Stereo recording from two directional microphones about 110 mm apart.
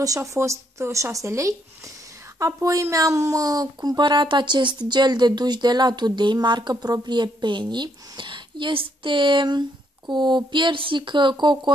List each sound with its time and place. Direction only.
0.0 s speech: 30° right (ahead or behind)